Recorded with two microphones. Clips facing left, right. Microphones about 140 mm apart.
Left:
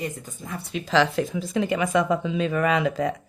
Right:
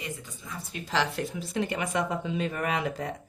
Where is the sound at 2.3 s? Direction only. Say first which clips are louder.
Left 6 dB; 90° left.